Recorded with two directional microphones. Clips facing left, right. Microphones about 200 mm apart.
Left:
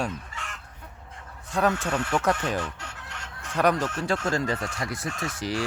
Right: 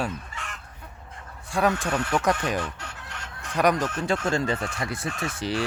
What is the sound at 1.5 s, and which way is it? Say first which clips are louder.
Speech: right 1 dB; 10° right (ahead or behind).